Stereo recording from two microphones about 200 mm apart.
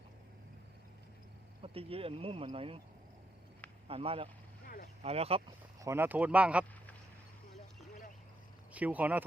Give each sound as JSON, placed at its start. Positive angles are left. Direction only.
{"t": 1.6, "sound": "speech", "side_deg": -30}
{"t": 3.8, "sound": "speech", "side_deg": -30}
{"t": 4.6, "sound": "boat", "side_deg": 45}
{"t": 5.0, "sound": "speech", "side_deg": -30}
{"t": 5.8, "sound": "speech", "side_deg": -10}
{"t": 8.7, "sound": "speech", "side_deg": -10}